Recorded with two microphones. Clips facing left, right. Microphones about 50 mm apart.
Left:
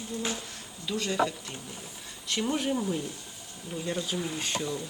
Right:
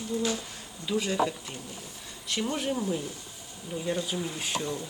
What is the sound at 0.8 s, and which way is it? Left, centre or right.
Speech, centre.